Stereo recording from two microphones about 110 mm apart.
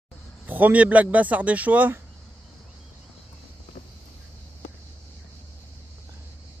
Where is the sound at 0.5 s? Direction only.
15° right (ahead or behind).